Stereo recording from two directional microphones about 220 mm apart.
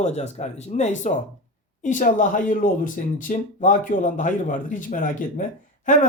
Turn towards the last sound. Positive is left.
turn(degrees=35)  # may be behind; listen again after turning